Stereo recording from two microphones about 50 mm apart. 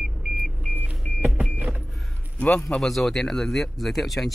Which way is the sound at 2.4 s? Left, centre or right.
Left.